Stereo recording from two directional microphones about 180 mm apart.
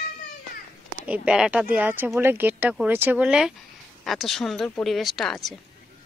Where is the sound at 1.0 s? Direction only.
5° right (ahead or behind).